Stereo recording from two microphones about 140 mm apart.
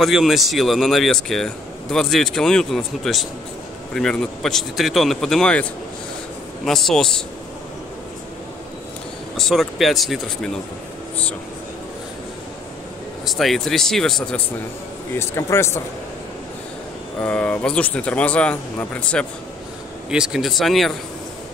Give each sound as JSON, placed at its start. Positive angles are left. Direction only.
{"t": 0.0, "sound": "speech", "side_deg": 0}
{"t": 9.4, "sound": "speech", "side_deg": 0}
{"t": 13.2, "sound": "speech", "side_deg": 0}
{"t": 15.1, "sound": "speech", "side_deg": 20}
{"t": 17.2, "sound": "speech", "side_deg": 10}
{"t": 20.1, "sound": "speech", "side_deg": -5}